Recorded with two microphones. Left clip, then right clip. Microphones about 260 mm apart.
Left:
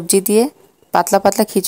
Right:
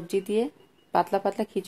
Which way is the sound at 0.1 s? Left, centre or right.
Left.